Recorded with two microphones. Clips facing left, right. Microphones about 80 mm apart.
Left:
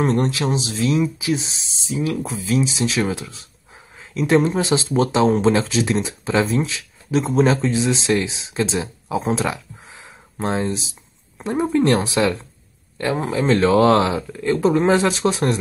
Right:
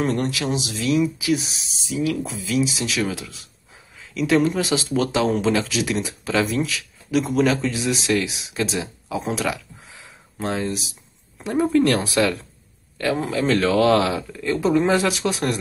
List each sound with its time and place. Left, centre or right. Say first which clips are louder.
0.0 s speech: left 3 dB; left